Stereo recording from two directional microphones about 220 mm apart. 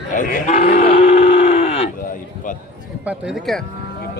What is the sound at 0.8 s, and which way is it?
Livestock, 25° left (ahead or behind).